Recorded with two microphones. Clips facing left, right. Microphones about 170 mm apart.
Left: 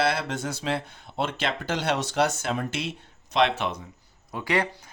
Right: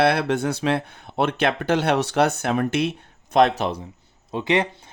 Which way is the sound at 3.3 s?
40° right (ahead or behind).